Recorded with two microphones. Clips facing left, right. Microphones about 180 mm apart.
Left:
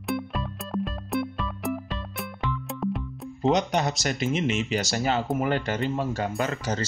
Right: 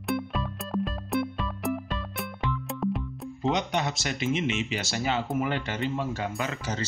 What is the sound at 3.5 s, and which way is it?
Speech, 40° left (ahead or behind).